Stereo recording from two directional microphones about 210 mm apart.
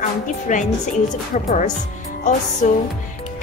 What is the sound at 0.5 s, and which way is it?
A woman's voice, 35° left (ahead or behind).